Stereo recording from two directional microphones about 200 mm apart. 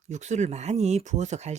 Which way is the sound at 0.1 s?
35° right (ahead or behind).